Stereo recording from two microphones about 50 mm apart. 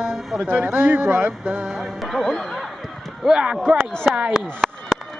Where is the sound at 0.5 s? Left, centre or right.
Right.